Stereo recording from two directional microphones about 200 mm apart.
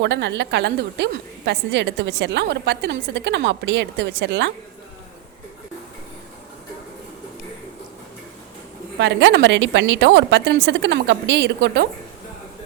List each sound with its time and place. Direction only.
0.0 s a woman's voice: 60° right (ahead or behind)
9.0 s a woman's voice: 60° right (ahead or behind)